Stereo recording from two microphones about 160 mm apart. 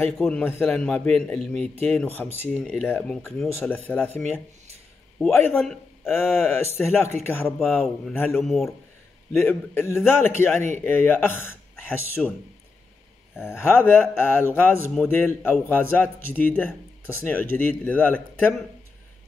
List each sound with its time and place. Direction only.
0.0 s speech: 5° left (ahead or behind)
5.6 s a man's voice: centre (ahead or behind)
6.1 s speech: 15° left (ahead or behind)
7.4 s speech: centre (ahead or behind)
8.1 s speech: 10° left (ahead or behind)
8.4 s speech: centre (ahead or behind)
9.3 s speech: 15° left (ahead or behind)
13.4 s speech: 15° left (ahead or behind)